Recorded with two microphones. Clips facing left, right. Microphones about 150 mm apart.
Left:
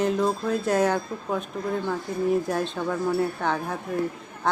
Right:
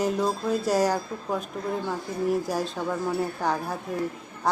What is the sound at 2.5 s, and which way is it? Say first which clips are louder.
Speech: left 1 dB; 5° right (ahead or behind).